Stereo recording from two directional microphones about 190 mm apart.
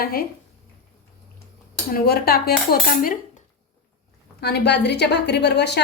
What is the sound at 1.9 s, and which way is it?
Cutlery, 55° left (ahead or behind).